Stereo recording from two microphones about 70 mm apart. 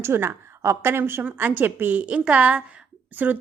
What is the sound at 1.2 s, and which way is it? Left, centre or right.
A woman's voice, right.